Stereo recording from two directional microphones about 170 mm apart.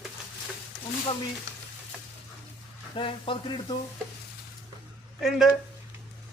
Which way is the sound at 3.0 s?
30° left (ahead or behind).